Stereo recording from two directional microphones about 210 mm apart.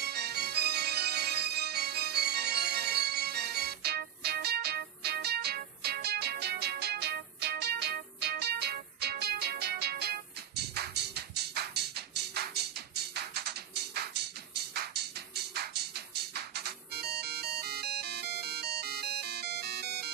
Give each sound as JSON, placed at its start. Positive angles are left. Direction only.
{"t": 0.0, "sound": "organ", "side_deg": -50}
{"t": 12.9, "sound": "music", "side_deg": -50}